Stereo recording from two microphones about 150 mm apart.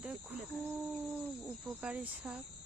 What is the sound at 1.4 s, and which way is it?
Cricket, 10° right (ahead or behind).